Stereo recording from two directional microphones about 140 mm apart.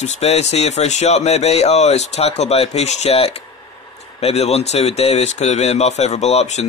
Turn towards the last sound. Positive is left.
turn(degrees=50)  # may be behind; listen again after turning